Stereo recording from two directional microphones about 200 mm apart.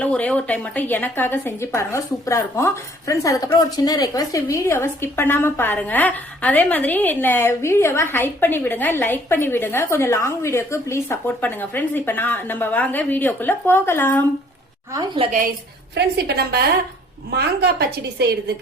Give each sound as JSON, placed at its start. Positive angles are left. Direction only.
{"t": 0.0, "sound": "a woman's voice", "side_deg": 5}
{"t": 14.9, "sound": "a woman's voice", "side_deg": -25}
{"t": 16.0, "sound": "a woman's voice", "side_deg": -55}